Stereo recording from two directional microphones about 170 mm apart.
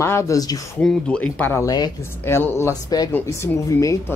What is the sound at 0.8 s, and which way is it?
A man's voice, 5° left (ahead or behind).